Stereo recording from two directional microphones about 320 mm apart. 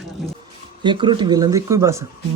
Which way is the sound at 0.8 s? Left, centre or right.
Centre.